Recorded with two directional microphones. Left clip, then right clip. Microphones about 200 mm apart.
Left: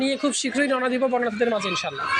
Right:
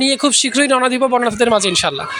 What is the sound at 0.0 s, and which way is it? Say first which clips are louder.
Speech: right 9 dB; 45° right (ahead or behind).